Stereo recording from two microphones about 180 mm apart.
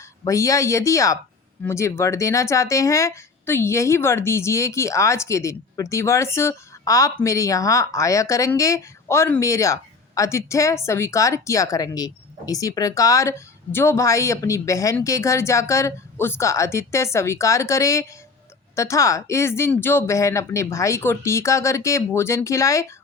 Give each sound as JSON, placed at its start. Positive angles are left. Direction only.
{"t": 0.3, "sound": "speech", "side_deg": 15}